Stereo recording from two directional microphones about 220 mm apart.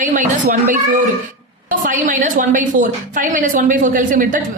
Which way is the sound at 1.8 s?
35° right (ahead or behind).